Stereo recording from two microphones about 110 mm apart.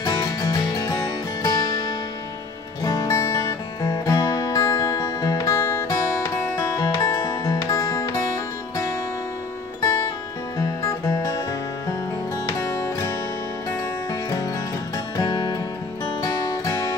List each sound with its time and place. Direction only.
0.0 s music: 35° left (ahead or behind)
2.8 s music: 35° left (ahead or behind)
10.6 s music: 30° left (ahead or behind)
12.4 s music: 30° left (ahead or behind)
15.1 s music: 40° left (ahead or behind)